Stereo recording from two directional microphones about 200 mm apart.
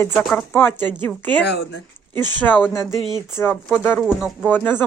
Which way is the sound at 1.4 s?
55° left (ahead or behind).